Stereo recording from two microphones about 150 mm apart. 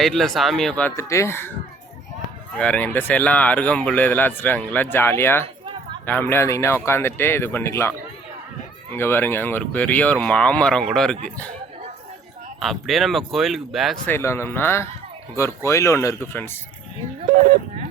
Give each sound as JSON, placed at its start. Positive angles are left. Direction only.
{"t": 0.0, "sound": "speech", "side_deg": 0}
{"t": 2.6, "sound": "speech", "side_deg": 10}
{"t": 12.5, "sound": "speech", "side_deg": 0}
{"t": 14.1, "sound": "speech", "side_deg": 15}